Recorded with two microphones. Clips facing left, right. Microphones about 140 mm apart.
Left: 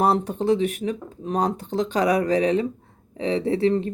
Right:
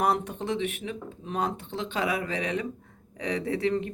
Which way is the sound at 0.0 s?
35° left (ahead or behind).